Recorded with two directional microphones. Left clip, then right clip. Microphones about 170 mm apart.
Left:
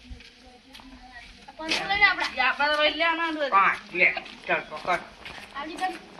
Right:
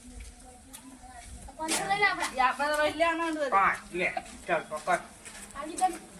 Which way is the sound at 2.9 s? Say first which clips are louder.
Left 3 dB; 30° right (ahead or behind).